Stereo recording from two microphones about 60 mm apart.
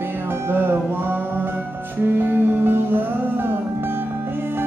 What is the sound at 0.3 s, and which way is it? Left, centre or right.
Music, right.